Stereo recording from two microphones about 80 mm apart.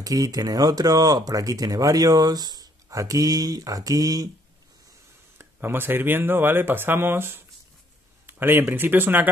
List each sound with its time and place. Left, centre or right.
0.0 s speech: right
5.4 s speech: right